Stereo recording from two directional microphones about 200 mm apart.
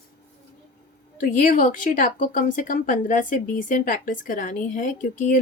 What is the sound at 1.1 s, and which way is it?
A woman's voice, 40° left (ahead or behind).